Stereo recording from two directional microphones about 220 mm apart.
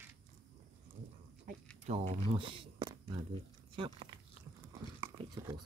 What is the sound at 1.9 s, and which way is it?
Speech, 25° right (ahead or behind).